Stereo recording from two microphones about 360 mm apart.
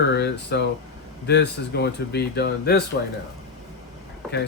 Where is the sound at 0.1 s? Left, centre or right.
Left.